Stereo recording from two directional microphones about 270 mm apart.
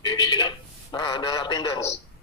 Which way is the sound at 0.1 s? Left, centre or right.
Centre.